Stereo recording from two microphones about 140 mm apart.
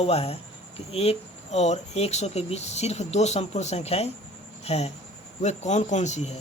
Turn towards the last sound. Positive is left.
turn(degrees=55)  # may be behind; listen again after turning